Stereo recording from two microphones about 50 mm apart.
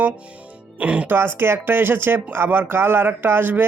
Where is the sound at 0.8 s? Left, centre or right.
Right.